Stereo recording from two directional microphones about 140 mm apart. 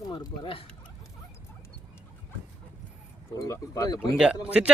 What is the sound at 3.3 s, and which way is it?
Speech, 25° left (ahead or behind).